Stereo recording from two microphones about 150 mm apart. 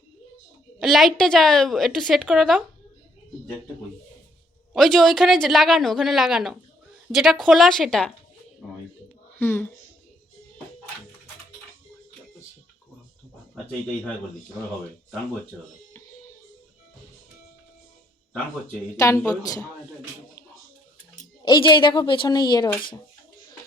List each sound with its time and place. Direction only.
0.8 s a woman's voice: centre (ahead or behind)
4.7 s a woman's voice: centre (ahead or behind)
9.4 s speech: 15° left (ahead or behind)
15.9 s music: 20° left (ahead or behind)
18.9 s a woman's voice: 20° left (ahead or behind)
21.4 s a woman's voice: 30° left (ahead or behind)